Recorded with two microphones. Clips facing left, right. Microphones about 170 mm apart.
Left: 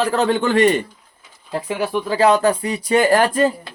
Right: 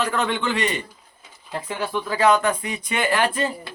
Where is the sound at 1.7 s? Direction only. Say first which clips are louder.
Left 5 dB; 15° left (ahead or behind).